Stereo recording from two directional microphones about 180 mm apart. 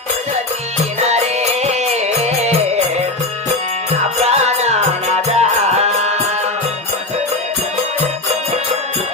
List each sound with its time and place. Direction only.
1.0 s music: 35° right (ahead or behind)
4.2 s music: 35° right (ahead or behind)